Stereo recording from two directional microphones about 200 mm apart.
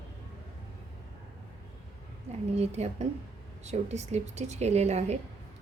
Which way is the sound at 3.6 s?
35° right (ahead or behind).